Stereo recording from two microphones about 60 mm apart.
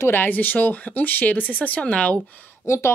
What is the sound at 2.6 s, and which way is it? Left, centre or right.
Speech, left.